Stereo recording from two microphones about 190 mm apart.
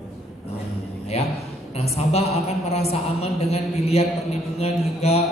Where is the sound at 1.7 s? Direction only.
35° left (ahead or behind).